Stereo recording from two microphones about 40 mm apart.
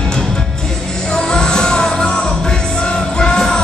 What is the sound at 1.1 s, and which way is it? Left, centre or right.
Music, centre.